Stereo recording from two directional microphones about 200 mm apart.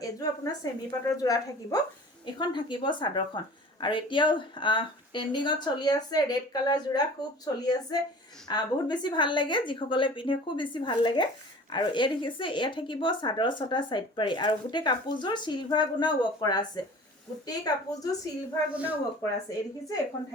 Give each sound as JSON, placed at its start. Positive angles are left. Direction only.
{"t": 0.0, "sound": "a woman's voice", "side_deg": 20}
{"t": 18.7, "sound": "speech", "side_deg": -5}